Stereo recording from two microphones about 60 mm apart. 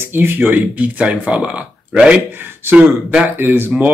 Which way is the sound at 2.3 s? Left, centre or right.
Right.